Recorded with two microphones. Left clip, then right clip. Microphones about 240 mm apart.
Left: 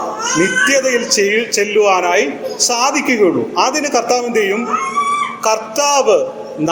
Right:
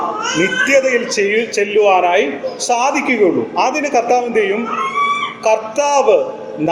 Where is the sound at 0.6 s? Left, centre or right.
Centre.